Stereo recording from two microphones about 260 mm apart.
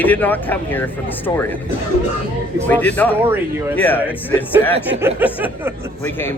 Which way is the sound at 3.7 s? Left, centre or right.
Centre.